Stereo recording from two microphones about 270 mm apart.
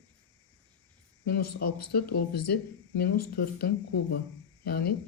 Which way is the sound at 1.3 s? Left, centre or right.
Left.